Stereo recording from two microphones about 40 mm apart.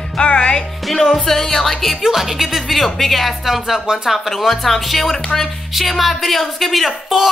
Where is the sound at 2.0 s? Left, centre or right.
Centre.